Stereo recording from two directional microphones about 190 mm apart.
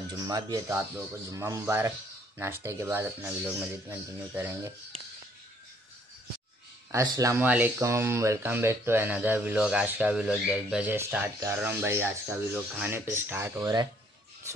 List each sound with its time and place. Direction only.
0.1 s speech: 20° right (ahead or behind)
4.9 s a sound: 30° right (ahead or behind)
6.9 s speech: 15° right (ahead or behind)